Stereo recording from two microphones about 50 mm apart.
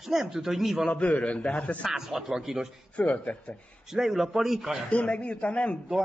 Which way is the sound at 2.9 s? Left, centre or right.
Left.